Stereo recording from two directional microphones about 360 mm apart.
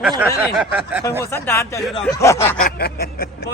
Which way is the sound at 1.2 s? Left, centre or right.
Centre.